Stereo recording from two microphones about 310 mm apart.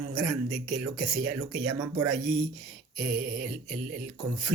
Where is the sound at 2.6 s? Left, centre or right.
Centre.